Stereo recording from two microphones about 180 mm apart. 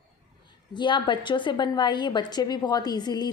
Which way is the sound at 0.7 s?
25° left (ahead or behind).